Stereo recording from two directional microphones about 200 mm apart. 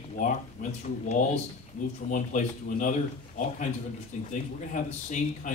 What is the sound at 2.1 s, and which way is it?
Speech, 40° left (ahead or behind).